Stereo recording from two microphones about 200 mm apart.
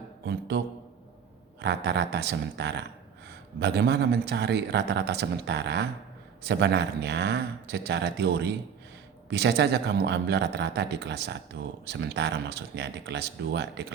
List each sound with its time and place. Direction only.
0.3 s mantra: 60° right (ahead or behind)
1.6 s speech: 60° right (ahead or behind)